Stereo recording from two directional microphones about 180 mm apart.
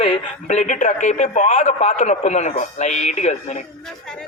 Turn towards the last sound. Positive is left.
turn(degrees=40)  # may be behind; listen again after turning